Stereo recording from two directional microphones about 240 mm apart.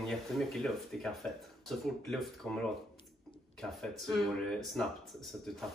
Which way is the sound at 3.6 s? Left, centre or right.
Centre.